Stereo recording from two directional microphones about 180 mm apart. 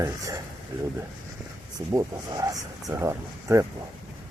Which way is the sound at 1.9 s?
20° right (ahead or behind).